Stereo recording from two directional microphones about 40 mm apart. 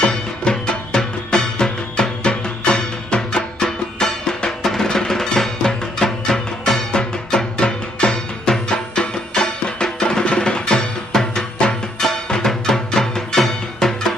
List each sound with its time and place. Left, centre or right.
0.0 s music: left